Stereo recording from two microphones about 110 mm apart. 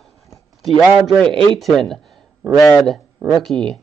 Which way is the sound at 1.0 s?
5° left (ahead or behind).